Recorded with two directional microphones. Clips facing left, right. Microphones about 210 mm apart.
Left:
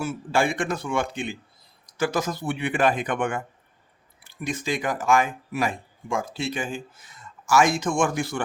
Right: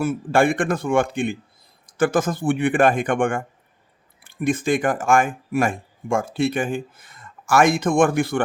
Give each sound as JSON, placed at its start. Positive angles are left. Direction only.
{"t": 0.0, "sound": "speech", "side_deg": -55}